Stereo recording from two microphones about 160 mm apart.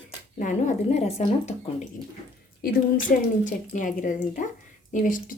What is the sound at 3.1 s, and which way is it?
Speech, 55° left (ahead or behind).